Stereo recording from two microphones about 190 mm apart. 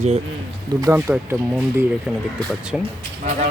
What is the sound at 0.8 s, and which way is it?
Speech, 15° right (ahead or behind).